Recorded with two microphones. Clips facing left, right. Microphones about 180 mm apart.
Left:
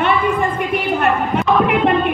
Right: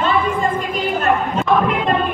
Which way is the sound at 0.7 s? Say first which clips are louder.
Left 1 dB; 65° left (ahead or behind).